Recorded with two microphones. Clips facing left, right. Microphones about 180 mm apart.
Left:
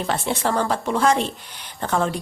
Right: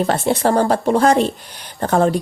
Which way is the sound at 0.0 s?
40° right (ahead or behind).